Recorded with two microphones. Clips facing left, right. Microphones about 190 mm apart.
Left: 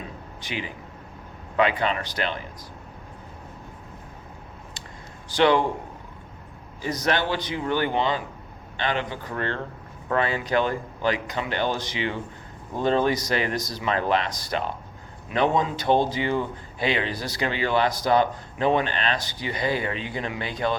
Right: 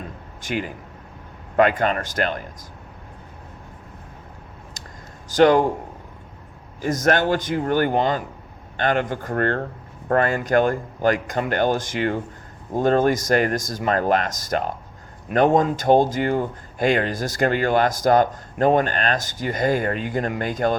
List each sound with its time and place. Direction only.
0.4 s speech: 45° right (ahead or behind)
4.8 s a sound: 40° right (ahead or behind)
5.3 s speech: 45° right (ahead or behind)
6.8 s speech: 45° right (ahead or behind)